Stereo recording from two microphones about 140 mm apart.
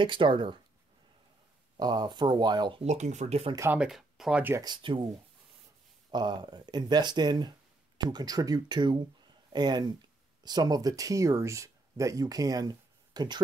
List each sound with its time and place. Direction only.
0.0 s speech: 35° right (ahead or behind)
1.8 s speech: 30° right (ahead or behind)
2.8 s speech: 55° right (ahead or behind)
3.7 s speech: 5° right (ahead or behind)
4.6 s speech: 30° right (ahead or behind)
6.1 s speech: 30° right (ahead or behind)